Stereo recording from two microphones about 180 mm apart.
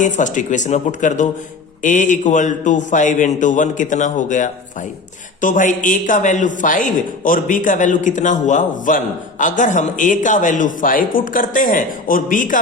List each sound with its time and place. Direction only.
0.0 s speech: 45° left (ahead or behind)